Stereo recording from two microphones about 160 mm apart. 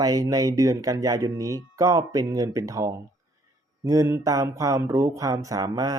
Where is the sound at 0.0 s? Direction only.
20° right (ahead or behind).